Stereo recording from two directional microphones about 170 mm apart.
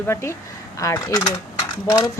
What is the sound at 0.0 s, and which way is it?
A woman's voice, 15° left (ahead or behind).